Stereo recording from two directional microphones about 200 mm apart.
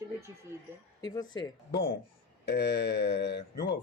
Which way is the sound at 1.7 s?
55° left (ahead or behind).